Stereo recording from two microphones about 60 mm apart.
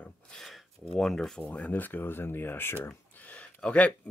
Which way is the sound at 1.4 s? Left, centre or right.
Left.